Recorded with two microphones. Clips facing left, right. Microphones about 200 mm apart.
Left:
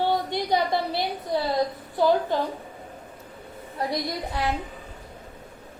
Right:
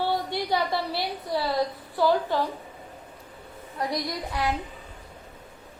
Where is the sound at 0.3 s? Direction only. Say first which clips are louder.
Left 2 dB; 20° left (ahead or behind).